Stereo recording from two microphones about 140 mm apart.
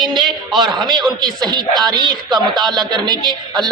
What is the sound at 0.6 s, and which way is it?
A man's voice, 30° right (ahead or behind).